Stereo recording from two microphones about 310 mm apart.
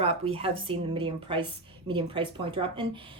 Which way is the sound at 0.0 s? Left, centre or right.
Centre.